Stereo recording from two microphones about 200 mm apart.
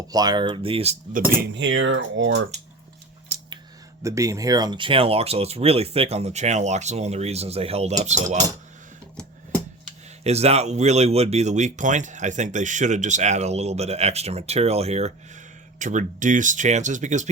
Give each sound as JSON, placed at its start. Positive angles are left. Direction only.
{"t": 0.1, "sound": "speech", "side_deg": -20}
{"t": 1.5, "sound": "speech", "side_deg": -70}
{"t": 4.0, "sound": "speech", "side_deg": -15}
{"t": 10.2, "sound": "speech", "side_deg": -30}